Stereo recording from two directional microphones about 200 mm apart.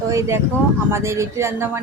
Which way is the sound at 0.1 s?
15° right (ahead or behind).